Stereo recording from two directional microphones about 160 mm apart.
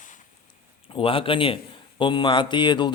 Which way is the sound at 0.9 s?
35° left (ahead or behind).